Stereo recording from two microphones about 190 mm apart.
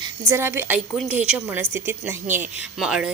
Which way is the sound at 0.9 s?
Centre (ahead or behind).